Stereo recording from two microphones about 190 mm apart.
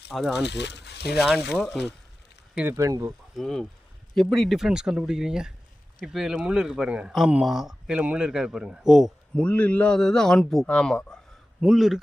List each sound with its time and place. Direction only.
0.1 s speech: centre (ahead or behind)
0.4 s speech: 65° left (ahead or behind)
1.5 s speech: centre (ahead or behind)
2.6 s speech: 15° right (ahead or behind)
3.3 s speech: centre (ahead or behind)